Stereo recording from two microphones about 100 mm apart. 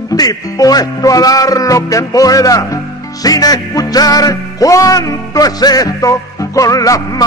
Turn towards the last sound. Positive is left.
turn(degrees=35)  # may be behind; listen again after turning